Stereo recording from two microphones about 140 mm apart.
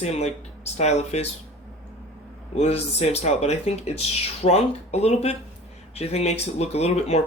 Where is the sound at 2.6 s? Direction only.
50° left (ahead or behind).